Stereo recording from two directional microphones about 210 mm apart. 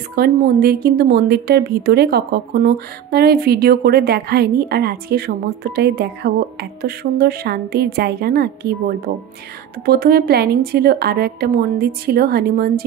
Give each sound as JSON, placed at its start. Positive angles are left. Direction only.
{"t": 0.1, "sound": "a woman's voice", "side_deg": -45}